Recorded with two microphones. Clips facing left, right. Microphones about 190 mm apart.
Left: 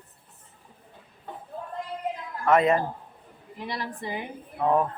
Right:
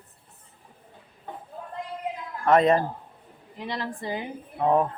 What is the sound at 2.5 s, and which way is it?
Speech, 35° right (ahead or behind).